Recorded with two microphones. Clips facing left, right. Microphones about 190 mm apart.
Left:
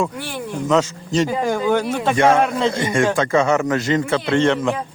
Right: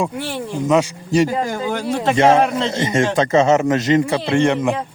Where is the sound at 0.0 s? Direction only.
25° right (ahead or behind).